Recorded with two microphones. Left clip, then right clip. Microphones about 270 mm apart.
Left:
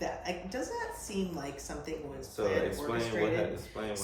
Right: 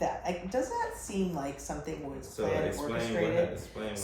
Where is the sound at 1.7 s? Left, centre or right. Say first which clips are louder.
Right 3 dB; centre.